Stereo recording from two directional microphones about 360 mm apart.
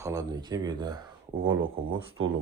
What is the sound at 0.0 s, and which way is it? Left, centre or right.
Speech, centre.